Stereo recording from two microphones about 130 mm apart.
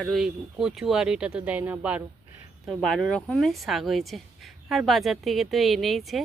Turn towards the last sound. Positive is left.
turn(degrees=0)  # may be behind; listen again after turning